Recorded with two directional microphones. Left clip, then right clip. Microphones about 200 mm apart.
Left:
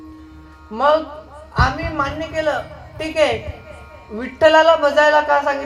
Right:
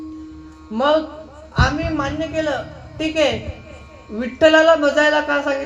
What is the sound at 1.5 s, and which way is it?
A woman's voice, 50° right (ahead or behind).